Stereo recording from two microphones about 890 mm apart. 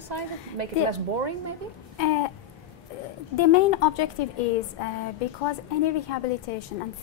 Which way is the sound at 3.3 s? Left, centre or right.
Left.